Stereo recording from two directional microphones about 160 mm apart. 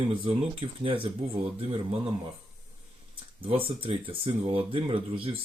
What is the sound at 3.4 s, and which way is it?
Speech, 35° right (ahead or behind).